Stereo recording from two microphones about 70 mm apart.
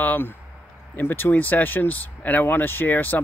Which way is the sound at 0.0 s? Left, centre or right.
Left.